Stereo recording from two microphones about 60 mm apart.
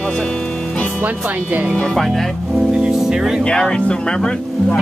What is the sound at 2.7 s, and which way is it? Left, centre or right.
Music, centre.